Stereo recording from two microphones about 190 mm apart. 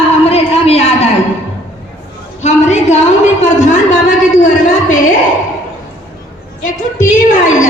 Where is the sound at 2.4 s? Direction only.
35° left (ahead or behind).